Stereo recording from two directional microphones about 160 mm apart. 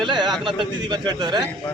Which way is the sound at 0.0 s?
30° right (ahead or behind).